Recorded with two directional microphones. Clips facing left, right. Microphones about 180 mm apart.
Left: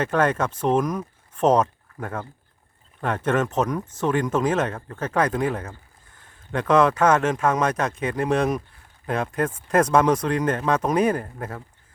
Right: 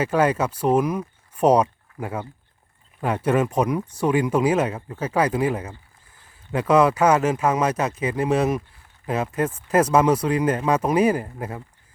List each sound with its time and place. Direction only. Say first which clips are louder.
0.0 s speech: right 1 dB; 10° right (ahead or behind)